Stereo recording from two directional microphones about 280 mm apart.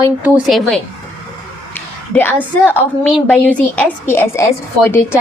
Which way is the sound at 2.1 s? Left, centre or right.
Centre.